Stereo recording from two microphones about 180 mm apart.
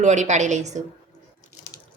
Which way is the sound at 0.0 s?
40° right (ahead or behind).